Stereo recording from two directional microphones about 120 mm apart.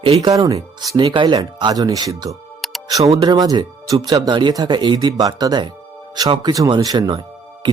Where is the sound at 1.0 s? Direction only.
40° right (ahead or behind).